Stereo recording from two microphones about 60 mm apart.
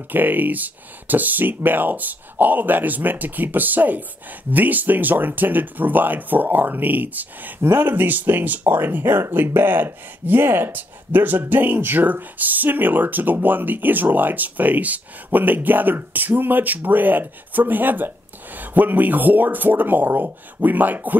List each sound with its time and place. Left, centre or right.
0.1 s speech: right